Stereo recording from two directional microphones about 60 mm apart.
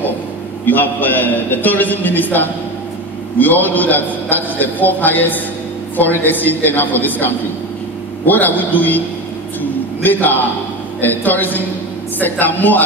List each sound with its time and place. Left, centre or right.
0.7 s a man's voice: left
9.6 s a sound: left
11.0 s a man's voice: left